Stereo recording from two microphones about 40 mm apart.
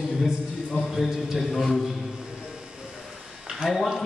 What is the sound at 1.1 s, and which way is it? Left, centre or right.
Mantra, centre.